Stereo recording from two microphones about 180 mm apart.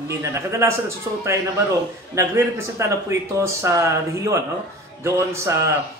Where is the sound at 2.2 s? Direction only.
15° right (ahead or behind).